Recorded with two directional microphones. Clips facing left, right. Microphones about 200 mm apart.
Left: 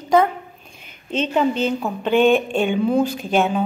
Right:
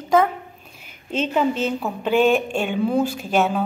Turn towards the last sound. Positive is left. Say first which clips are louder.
# left 1 dB
turn(degrees=-5)  # may be behind; listen again after turning